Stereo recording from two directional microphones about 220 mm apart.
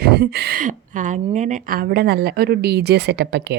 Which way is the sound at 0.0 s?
45° right (ahead or behind).